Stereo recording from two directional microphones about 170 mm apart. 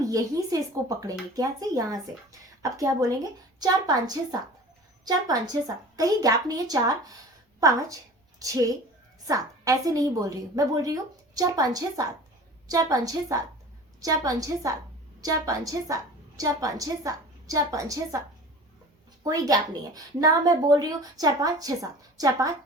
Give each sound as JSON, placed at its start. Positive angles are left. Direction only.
{"t": 0.0, "sound": "a woman's voice", "side_deg": -20}
{"t": 19.2, "sound": "a woman's voice", "side_deg": -20}